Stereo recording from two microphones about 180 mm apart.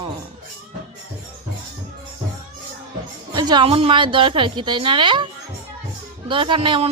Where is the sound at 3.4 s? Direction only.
25° right (ahead or behind).